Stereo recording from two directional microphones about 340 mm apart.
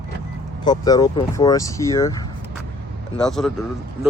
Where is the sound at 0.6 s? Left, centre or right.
Centre.